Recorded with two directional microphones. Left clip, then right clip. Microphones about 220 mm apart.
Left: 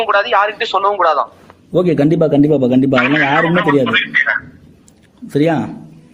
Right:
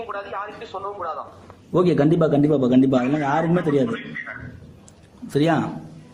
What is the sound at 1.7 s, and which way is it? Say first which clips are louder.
Speech: left 5 dB; 20° left (ahead or behind).